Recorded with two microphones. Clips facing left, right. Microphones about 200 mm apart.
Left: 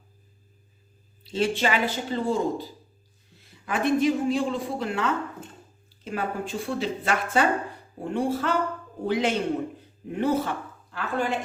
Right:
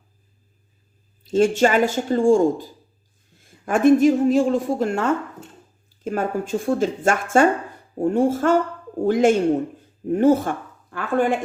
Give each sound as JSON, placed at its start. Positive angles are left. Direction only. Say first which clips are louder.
{"t": 1.2, "sound": "speech", "louder": "right 8 dB", "side_deg": -45}